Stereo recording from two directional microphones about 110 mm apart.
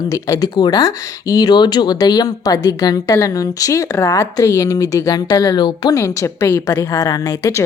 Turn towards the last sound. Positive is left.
turn(degrees=30)  # may be behind; listen again after turning